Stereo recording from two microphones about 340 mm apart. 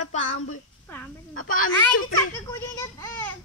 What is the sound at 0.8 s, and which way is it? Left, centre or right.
Speech, centre.